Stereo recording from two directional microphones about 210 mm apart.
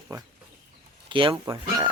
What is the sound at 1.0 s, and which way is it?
Speech, 25° right (ahead or behind).